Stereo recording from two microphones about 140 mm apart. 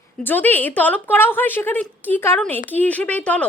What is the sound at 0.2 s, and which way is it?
A woman's voice, 15° left (ahead or behind).